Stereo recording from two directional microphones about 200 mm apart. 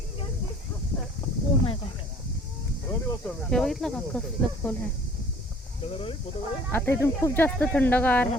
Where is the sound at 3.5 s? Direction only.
Centre (ahead or behind).